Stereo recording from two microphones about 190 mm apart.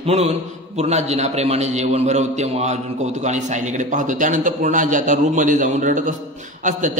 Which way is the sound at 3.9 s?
40° right (ahead or behind).